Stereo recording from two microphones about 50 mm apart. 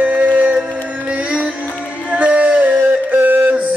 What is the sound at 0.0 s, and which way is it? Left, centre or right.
Music, right.